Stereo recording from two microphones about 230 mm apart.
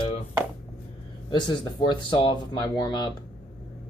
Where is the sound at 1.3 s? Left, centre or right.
Centre.